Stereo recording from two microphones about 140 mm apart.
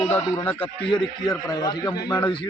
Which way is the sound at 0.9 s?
30° left (ahead or behind).